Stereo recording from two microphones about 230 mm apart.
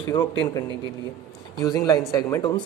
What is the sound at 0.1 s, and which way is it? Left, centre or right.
A man's voice, centre.